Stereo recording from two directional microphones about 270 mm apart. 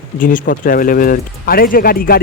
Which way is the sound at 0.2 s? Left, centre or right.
Left.